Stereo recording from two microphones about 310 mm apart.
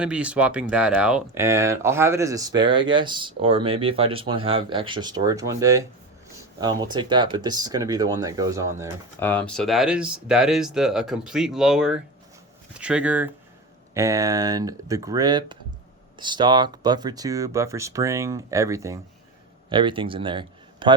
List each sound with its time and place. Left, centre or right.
0.0 s speech: centre
9.1 s a man's voice: centre